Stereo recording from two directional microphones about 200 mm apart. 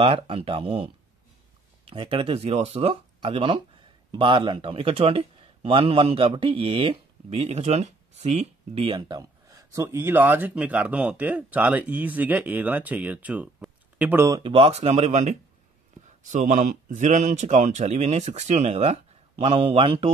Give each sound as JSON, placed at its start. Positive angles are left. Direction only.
{"t": 0.0, "sound": "speech", "side_deg": -30}
{"t": 14.4, "sound": "a man's voice", "side_deg": -30}